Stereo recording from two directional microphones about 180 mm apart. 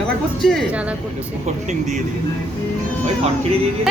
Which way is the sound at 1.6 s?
40° right (ahead or behind).